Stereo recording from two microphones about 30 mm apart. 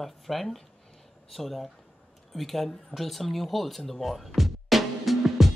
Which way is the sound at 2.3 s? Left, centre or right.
Centre.